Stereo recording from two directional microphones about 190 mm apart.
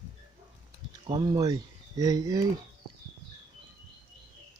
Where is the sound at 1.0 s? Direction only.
25° right (ahead or behind).